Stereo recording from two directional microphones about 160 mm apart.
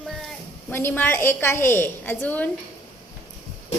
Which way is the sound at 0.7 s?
15° left (ahead or behind).